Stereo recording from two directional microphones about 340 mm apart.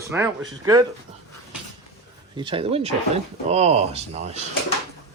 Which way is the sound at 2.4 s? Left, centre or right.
Centre.